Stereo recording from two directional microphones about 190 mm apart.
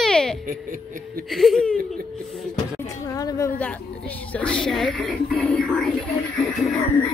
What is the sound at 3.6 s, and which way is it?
A woman's voice, 10° left (ahead or behind).